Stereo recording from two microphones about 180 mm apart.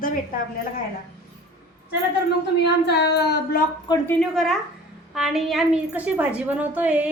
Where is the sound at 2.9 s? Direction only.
65° left (ahead or behind).